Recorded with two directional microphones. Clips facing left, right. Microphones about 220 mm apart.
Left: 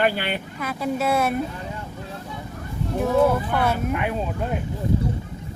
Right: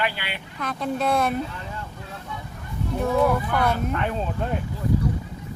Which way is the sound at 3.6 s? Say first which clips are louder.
Left 1 dB; 5° left (ahead or behind).